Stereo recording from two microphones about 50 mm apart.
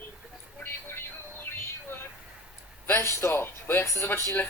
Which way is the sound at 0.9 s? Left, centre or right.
Left.